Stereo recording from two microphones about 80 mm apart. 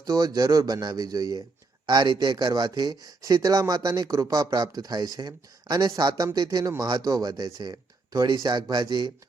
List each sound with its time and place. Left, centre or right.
0.0 s speech: right
1.9 s speech: right